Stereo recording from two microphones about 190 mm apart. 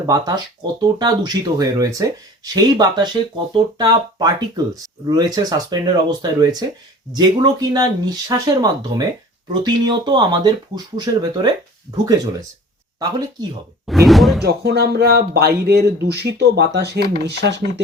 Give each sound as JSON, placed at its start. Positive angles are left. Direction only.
{"t": 0.0, "sound": "speech", "side_deg": -20}
{"t": 13.8, "sound": "speech", "side_deg": 0}
{"t": 14.4, "sound": "speech", "side_deg": -60}